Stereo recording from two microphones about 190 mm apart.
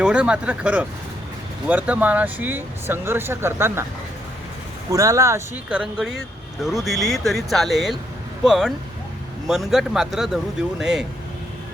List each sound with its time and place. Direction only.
0.0 s speech: 5° right (ahead or behind)
4.9 s speech: 15° right (ahead or behind)
5.6 s speech: 5° right (ahead or behind)